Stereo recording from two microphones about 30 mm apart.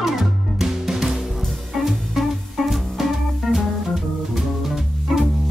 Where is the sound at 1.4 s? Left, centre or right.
Centre.